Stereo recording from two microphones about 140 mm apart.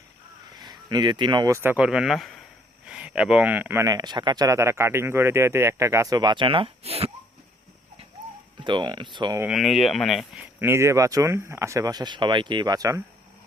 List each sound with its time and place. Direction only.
0.5 s speech: 30° right (ahead or behind)
1.7 s speech: 5° right (ahead or behind); by 7.1 s 45° right (ahead or behind)
8.5 s speech: 35° right (ahead or behind)
9.5 s speech: centre (ahead or behind)
10.4 s speech: 15° right (ahead or behind)